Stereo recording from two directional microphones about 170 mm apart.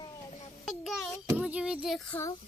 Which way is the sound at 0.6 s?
Centre (ahead or behind).